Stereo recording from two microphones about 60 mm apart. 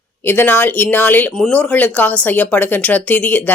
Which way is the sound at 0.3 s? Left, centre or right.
Left.